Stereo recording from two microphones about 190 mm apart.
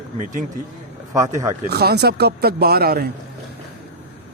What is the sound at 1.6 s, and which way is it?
Speech, 55° right (ahead or behind).